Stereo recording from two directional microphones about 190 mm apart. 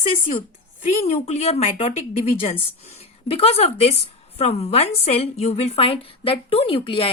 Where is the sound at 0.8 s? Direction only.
40° left (ahead or behind).